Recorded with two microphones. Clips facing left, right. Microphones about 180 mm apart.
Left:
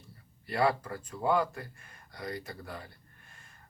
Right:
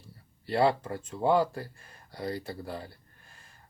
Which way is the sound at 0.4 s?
30° right (ahead or behind).